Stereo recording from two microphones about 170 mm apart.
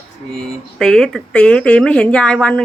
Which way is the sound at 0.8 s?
5° left (ahead or behind).